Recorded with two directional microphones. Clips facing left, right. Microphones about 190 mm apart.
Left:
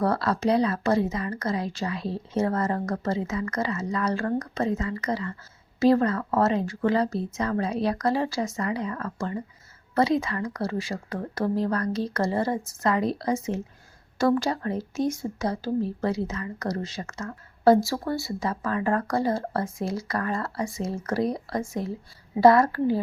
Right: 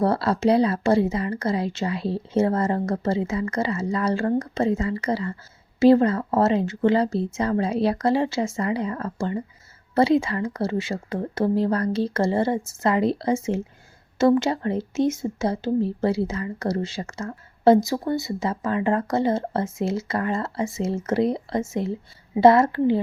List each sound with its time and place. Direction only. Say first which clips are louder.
0.0 s speech: right 3 dB; 30° right (ahead or behind)